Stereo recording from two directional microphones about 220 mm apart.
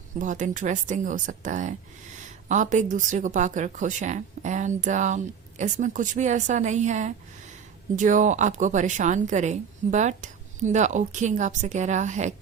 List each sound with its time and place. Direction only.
0.2 s speech: 35° right (ahead or behind)